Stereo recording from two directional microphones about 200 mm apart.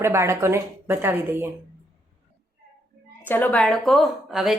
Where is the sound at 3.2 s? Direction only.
10° left (ahead or behind).